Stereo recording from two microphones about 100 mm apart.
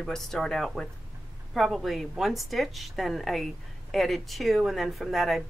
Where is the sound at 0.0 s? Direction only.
5° left (ahead or behind).